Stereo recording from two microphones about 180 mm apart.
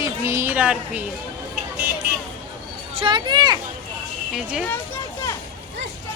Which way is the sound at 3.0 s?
25° right (ahead or behind).